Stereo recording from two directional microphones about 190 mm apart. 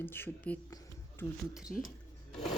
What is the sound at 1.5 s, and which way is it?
Speech, centre (ahead or behind).